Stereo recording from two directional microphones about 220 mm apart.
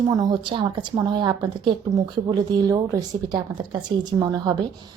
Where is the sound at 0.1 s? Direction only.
20° right (ahead or behind).